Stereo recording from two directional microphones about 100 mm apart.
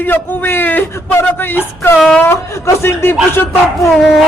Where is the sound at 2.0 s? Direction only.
10° left (ahead or behind).